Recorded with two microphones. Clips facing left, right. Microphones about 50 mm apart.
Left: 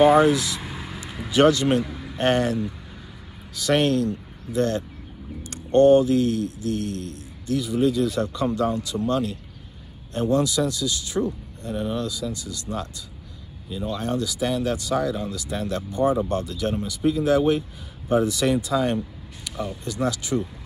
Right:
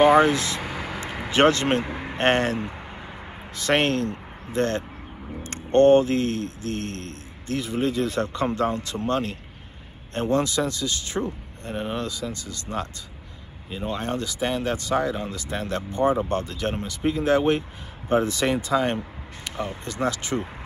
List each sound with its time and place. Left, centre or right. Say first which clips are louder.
0.0 s speech: left 1 dB; right